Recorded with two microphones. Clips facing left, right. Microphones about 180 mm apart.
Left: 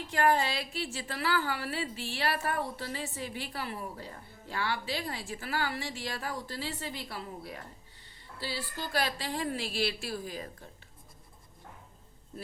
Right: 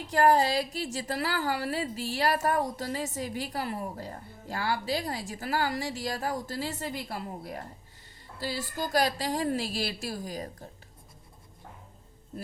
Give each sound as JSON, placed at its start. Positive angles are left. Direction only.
{"t": 0.1, "sound": "a woman's voice", "side_deg": -40}